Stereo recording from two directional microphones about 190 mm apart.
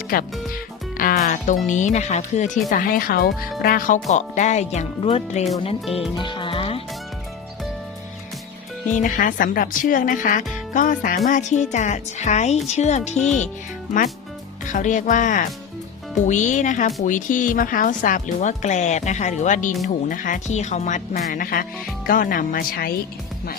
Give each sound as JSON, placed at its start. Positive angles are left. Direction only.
{"t": 0.1, "sound": "speech", "side_deg": 50}
{"t": 6.1, "sound": "music", "side_deg": 25}
{"t": 9.0, "sound": "speech", "side_deg": 45}
{"t": 14.7, "sound": "speech", "side_deg": 40}